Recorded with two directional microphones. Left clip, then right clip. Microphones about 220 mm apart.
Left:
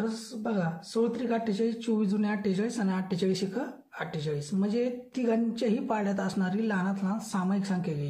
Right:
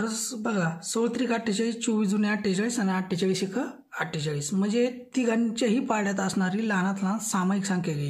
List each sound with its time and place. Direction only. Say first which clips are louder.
0.0 s speech: right 3 dB; 40° right (ahead or behind)